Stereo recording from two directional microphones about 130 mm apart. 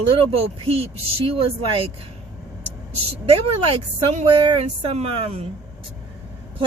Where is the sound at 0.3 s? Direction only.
50° right (ahead or behind).